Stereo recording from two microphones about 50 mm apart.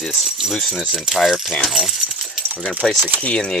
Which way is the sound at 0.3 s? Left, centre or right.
Centre.